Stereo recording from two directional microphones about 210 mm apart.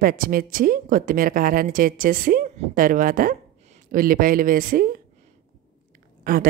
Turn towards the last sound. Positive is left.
turn(degrees=-40)  # may be behind; listen again after turning